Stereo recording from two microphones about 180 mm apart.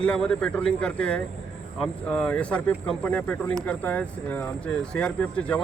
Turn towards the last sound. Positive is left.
turn(degrees=5)  # may be behind; listen again after turning